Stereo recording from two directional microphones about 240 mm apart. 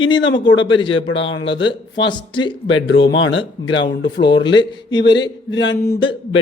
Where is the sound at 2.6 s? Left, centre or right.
Left.